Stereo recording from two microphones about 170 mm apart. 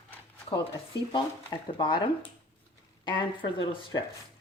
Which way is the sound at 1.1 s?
25° left (ahead or behind).